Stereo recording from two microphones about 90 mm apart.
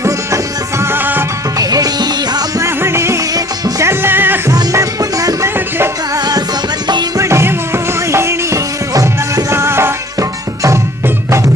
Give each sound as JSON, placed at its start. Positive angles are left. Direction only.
{"t": 0.8, "sound": "music", "side_deg": -25}
{"t": 1.5, "sound": "music", "side_deg": -45}
{"t": 2.6, "sound": "music", "side_deg": -30}
{"t": 4.7, "sound": "music", "side_deg": -40}
{"t": 5.5, "sound": "music", "side_deg": -25}
{"t": 6.1, "sound": "music", "side_deg": -50}
{"t": 7.2, "sound": "music", "side_deg": -30}